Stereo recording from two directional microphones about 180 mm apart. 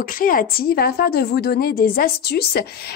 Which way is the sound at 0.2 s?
50° left (ahead or behind).